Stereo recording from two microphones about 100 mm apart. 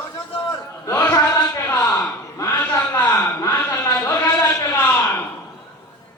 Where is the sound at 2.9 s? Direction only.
20° left (ahead or behind).